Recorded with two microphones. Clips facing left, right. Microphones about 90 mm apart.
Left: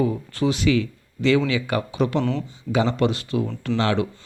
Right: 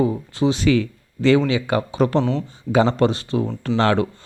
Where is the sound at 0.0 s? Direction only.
25° right (ahead or behind).